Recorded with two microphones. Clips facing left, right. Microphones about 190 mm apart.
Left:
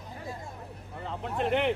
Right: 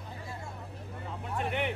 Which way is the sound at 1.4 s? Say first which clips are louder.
Left 6 dB; 70° left (ahead or behind).